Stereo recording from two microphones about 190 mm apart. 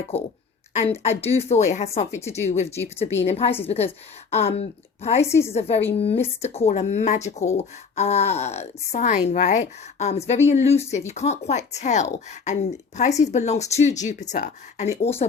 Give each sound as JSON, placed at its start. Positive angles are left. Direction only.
{"t": 0.1, "sound": "a woman's voice", "side_deg": 10}
{"t": 0.7, "sound": "a woman's voice", "side_deg": 35}